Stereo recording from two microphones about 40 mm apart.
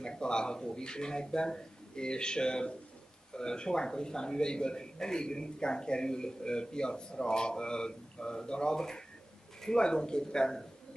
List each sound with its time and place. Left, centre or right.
0.0 s a man's voice: centre